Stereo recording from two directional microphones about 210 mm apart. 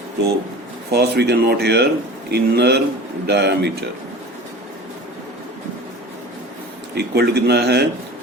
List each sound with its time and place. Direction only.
0.9 s speech: 50° right (ahead or behind)
6.9 s speech: 50° right (ahead or behind)